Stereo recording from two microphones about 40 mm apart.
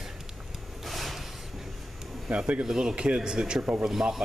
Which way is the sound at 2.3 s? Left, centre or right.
Right.